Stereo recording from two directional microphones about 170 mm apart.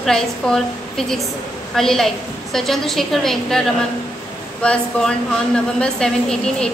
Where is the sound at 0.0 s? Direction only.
5° left (ahead or behind).